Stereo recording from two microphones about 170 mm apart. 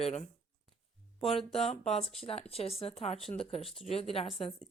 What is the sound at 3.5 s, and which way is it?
Speech, centre (ahead or behind).